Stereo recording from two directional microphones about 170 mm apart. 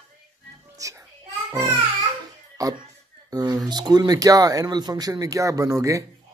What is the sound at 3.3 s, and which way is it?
Speech, 25° right (ahead or behind).